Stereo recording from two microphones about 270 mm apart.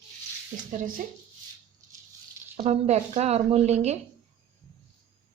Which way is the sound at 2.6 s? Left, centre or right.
Right.